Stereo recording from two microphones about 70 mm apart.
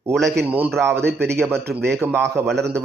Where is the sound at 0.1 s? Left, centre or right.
Centre.